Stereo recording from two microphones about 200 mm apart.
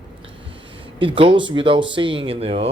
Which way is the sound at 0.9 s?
25° right (ahead or behind).